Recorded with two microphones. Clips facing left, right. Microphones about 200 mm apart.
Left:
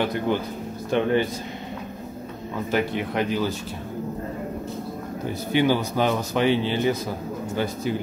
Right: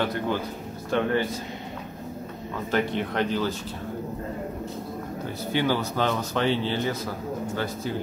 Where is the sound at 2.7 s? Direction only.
10° left (ahead or behind).